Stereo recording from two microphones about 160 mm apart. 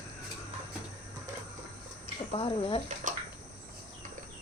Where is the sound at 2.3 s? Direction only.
35° left (ahead or behind).